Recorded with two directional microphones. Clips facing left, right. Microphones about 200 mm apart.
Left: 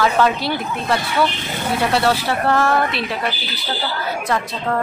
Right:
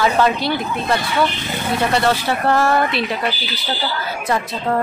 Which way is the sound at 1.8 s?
5° left (ahead or behind).